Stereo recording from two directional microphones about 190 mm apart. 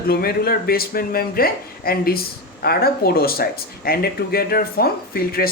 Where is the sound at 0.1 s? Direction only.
55° left (ahead or behind).